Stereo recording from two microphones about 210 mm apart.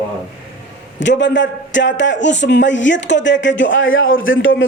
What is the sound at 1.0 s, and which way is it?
A man's voice, 60° left (ahead or behind).